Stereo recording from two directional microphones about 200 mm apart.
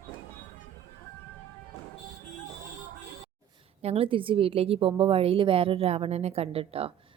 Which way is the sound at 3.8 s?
30° right (ahead or behind).